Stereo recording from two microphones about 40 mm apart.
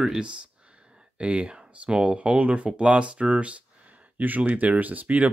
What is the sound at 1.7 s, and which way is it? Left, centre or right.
Speech, right.